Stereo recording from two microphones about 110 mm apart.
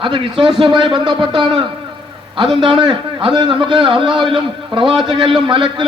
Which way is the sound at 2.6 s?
45° right (ahead or behind).